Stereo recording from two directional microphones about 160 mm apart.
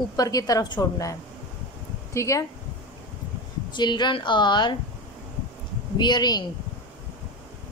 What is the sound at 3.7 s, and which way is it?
A woman's voice, 30° left (ahead or behind).